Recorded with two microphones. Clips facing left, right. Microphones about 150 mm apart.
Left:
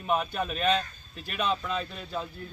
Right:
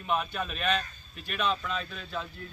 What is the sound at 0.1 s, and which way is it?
Speech, 15° left (ahead or behind).